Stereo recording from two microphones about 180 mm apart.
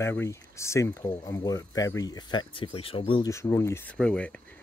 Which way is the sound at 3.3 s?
15° left (ahead or behind).